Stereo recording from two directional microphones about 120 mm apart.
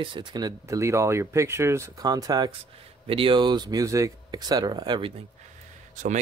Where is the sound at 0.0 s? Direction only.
40° right (ahead or behind).